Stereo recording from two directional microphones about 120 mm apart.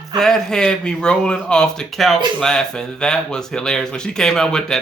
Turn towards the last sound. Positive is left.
turn(degrees=5)  # may be behind; listen again after turning